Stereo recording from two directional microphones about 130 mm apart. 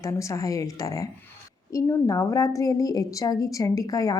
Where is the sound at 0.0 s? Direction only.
25° left (ahead or behind).